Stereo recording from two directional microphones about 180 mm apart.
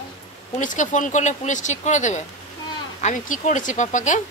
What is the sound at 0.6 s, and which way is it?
Speech, 45° left (ahead or behind).